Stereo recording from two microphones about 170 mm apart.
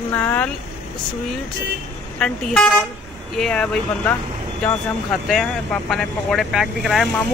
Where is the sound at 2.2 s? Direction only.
5° left (ahead or behind).